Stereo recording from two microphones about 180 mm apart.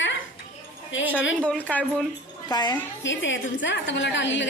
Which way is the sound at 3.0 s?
90° left.